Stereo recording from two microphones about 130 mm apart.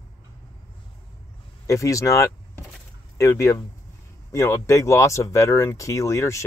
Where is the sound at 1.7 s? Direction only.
25° left (ahead or behind).